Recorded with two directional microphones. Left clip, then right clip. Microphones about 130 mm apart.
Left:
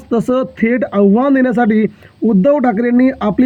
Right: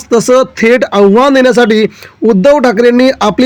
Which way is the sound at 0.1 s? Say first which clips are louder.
Right 8 dB; 30° right (ahead or behind).